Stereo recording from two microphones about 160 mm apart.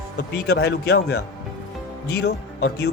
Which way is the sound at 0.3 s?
85° left.